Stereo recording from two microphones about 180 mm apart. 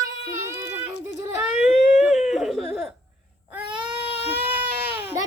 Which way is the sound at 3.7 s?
25° right (ahead or behind).